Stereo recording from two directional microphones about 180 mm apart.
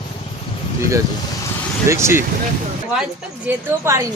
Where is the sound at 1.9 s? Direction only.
15° right (ahead or behind).